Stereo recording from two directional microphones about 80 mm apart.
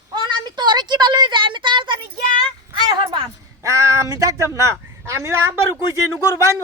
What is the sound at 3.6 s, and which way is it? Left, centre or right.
Speech, right.